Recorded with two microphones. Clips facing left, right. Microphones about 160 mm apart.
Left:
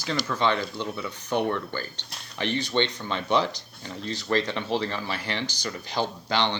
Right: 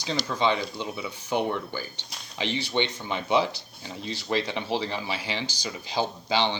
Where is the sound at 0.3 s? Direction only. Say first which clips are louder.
Even; 15° right (ahead or behind).